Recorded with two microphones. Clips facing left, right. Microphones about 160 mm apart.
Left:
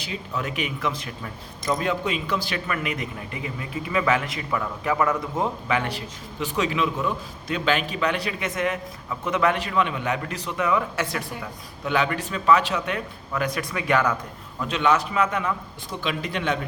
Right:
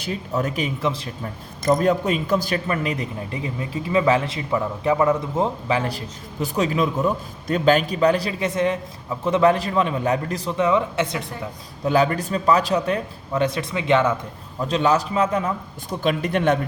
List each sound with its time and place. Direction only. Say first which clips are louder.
0.0 s a man's voice: right 6 dB; 45° right (ahead or behind)
1.6 s a man's voice: right 6 dB; 45° right (ahead or behind); by 11.3 s 20° right (ahead or behind)
11.9 s a man's voice: right 5 dB; 35° right (ahead or behind)
16.0 s speech: right 7 dB; 50° right (ahead or behind)